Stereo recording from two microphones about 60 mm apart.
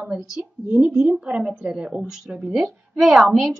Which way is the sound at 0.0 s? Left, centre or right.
Centre.